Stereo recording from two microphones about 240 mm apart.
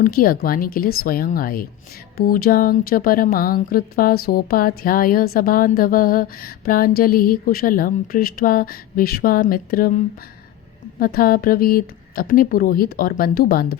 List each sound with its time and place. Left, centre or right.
0.0 s speech: left
11.0 s speech: left